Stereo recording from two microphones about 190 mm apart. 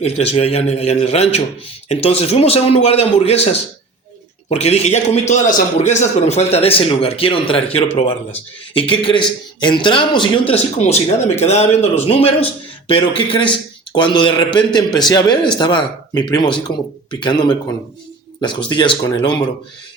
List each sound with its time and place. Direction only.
0.0 s a man's voice: 35° left (ahead or behind)
8.9 s a man's voice: 25° left (ahead or behind)